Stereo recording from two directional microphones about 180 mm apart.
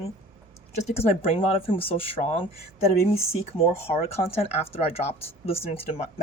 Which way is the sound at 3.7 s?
35° left (ahead or behind).